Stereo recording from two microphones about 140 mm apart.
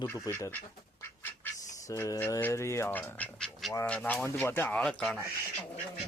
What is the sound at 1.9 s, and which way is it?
Speech, 20° left (ahead or behind).